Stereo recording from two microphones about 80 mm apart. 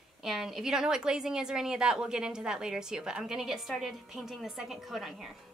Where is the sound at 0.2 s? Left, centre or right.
Centre.